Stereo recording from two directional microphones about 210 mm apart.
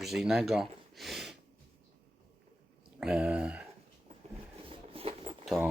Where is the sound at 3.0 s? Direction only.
5° right (ahead or behind).